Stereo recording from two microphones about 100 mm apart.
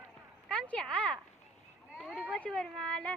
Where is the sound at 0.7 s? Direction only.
15° left (ahead or behind).